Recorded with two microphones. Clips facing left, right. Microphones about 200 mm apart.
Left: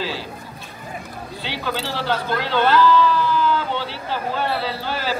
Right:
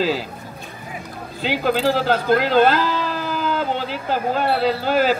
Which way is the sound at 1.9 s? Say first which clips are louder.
Right 6 dB; 45° right (ahead or behind).